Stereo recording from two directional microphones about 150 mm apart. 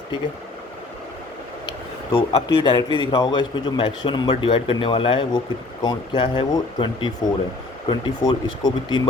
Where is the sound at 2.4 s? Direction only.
30° left (ahead or behind).